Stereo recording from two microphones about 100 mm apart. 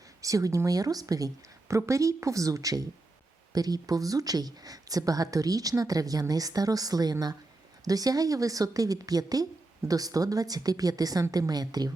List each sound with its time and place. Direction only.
0.2 s speech: 35° right (ahead or behind)